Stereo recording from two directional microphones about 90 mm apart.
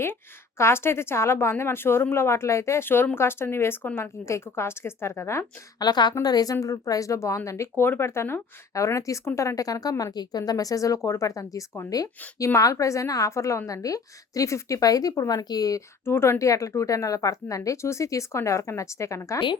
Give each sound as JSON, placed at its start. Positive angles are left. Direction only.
{"t": 0.6, "sound": "a woman's voice", "side_deg": 30}
{"t": 5.8, "sound": "a woman's voice", "side_deg": 50}
{"t": 16.0, "sound": "speech", "side_deg": 25}